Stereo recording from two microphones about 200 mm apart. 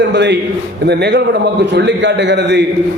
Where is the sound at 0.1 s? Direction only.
60° right (ahead or behind).